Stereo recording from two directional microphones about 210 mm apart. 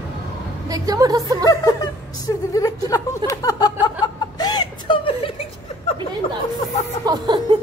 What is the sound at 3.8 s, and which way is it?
Chuckle, 20° left (ahead or behind).